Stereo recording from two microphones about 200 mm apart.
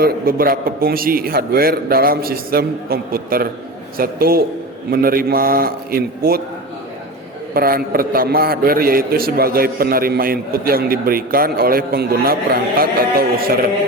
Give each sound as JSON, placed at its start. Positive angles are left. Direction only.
{"t": 0.0, "sound": "a man's voice", "side_deg": -45}
{"t": 7.5, "sound": "a man's voice", "side_deg": -45}